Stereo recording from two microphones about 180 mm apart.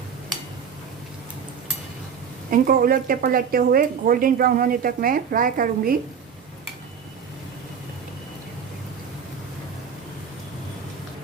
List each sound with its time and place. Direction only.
2.5 s speech: 50° right (ahead or behind)